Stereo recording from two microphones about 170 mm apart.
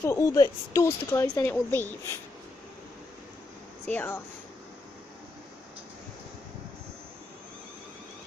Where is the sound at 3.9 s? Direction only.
10° left (ahead or behind).